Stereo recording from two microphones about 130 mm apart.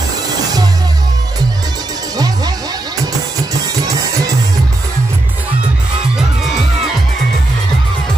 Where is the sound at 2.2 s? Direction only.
30° right (ahead or behind).